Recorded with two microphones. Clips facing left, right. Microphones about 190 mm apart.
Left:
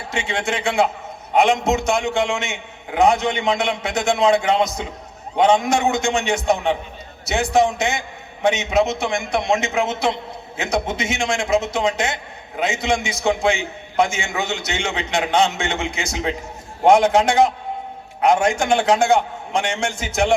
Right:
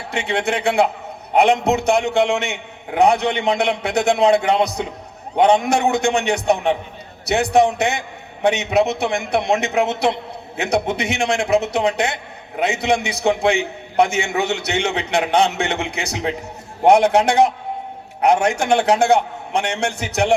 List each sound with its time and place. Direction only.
0.1 s a man's voice: 60° right (ahead or behind)